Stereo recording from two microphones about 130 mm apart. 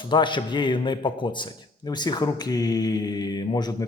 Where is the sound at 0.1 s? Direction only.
35° left (ahead or behind).